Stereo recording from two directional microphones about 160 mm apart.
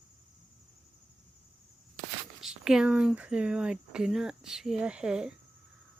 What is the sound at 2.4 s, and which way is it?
Speech, 5° right (ahead or behind).